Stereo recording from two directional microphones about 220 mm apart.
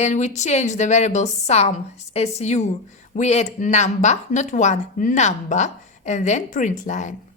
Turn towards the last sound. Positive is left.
turn(degrees=35)  # may be behind; listen again after turning